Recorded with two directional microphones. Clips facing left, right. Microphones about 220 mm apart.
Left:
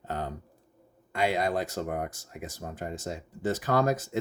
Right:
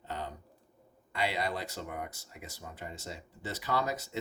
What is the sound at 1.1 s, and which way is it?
Speech, 50° left (ahead or behind).